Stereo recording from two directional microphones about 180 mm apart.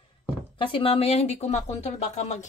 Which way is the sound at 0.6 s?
30° left (ahead or behind).